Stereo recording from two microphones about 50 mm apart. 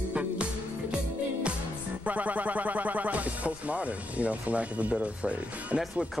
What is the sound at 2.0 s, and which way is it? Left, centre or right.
Speech, right.